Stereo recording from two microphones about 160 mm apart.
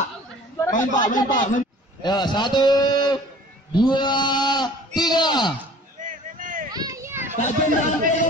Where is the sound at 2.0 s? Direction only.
25° left (ahead or behind).